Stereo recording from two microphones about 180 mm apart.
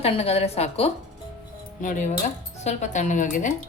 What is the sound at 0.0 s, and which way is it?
A woman's voice, 35° left (ahead or behind).